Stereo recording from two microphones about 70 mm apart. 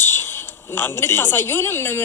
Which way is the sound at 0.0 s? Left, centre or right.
Left.